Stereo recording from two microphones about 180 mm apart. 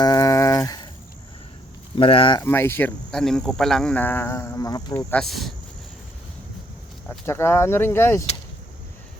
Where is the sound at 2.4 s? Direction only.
10° left (ahead or behind).